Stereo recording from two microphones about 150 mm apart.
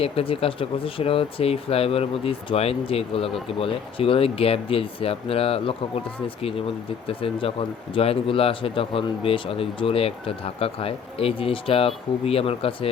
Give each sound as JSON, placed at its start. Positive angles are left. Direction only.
{"t": 0.0, "sound": "speech", "side_deg": 40}
{"t": 7.1, "sound": "speech", "side_deg": 40}